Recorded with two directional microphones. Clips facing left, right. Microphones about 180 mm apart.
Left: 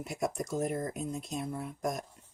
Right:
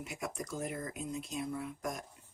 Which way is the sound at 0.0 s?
40° left (ahead or behind).